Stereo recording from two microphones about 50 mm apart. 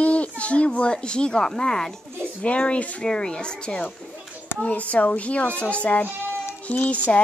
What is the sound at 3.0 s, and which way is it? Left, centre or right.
Speech, centre.